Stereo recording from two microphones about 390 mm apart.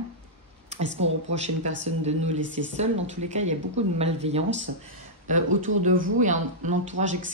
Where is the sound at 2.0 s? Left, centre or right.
Centre.